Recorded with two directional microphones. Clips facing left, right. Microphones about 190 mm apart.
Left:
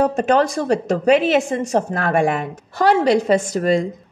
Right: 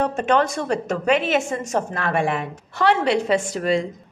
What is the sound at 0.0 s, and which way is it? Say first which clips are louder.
A woman's voice: left 4 dB; 40° left (ahead or behind).